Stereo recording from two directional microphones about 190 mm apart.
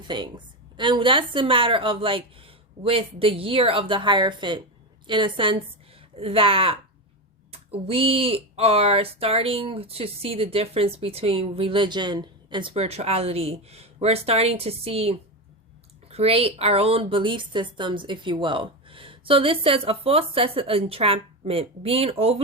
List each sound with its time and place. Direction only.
0.1 s a woman's voice: 25° right (ahead or behind)